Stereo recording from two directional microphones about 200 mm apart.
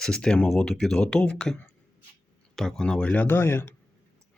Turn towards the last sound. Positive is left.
turn(degrees=10)  # may be behind; listen again after turning